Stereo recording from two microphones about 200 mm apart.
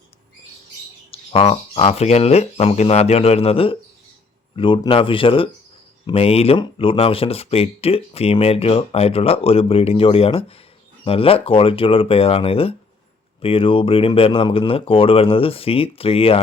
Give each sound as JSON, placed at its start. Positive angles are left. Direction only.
{"t": 1.1, "sound": "speech", "side_deg": 30}